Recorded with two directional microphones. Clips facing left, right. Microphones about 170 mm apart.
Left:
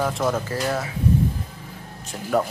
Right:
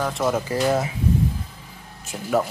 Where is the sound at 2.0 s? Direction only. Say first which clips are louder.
Even; 5° right (ahead or behind).